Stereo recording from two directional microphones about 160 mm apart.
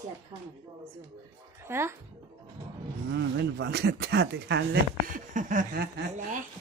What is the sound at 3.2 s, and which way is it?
Speech, 90° right.